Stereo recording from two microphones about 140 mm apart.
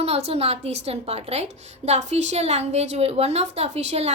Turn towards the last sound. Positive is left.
turn(degrees=-50)  # may be behind; listen again after turning